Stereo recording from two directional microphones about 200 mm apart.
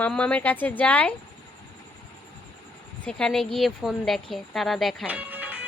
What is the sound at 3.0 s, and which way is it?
A woman's voice, 5° left (ahead or behind).